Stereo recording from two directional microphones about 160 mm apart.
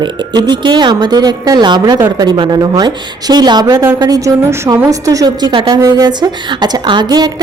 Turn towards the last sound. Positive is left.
turn(degrees=-25)  # may be behind; listen again after turning